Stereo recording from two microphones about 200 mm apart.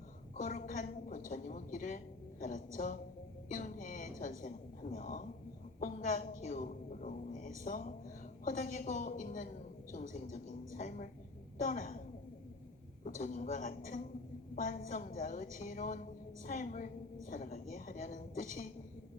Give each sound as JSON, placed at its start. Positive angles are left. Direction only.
{"t": 0.3, "sound": "a woman's voice", "side_deg": 40}
{"t": 13.1, "sound": "a woman's voice", "side_deg": 40}